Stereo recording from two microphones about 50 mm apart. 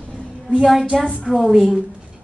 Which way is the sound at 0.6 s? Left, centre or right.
Centre.